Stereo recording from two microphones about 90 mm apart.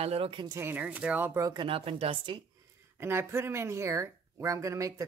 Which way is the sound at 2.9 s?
25° right (ahead or behind).